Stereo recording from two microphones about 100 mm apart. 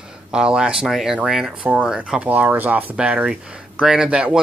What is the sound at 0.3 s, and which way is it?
Speech, 10° right (ahead or behind).